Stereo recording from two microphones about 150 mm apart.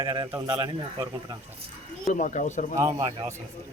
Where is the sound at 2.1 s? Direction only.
55° left (ahead or behind).